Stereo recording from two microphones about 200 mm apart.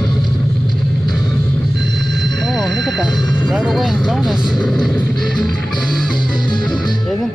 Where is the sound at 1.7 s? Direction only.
60° right (ahead or behind).